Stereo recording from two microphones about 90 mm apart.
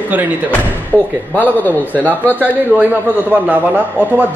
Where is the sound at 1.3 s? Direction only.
20° left (ahead or behind).